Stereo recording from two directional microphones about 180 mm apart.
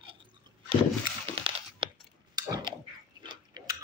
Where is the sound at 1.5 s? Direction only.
30° right (ahead or behind).